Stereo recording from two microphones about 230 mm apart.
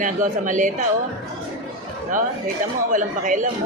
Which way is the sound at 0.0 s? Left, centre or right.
Right.